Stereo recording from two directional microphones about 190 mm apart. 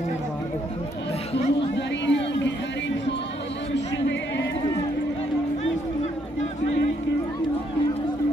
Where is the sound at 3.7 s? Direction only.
70° left (ahead or behind).